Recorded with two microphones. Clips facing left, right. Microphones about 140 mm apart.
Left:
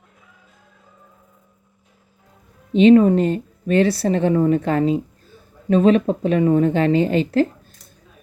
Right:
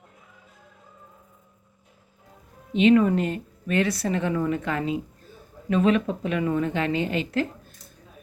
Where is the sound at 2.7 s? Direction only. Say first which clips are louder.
Left 7 dB; 30° left (ahead or behind).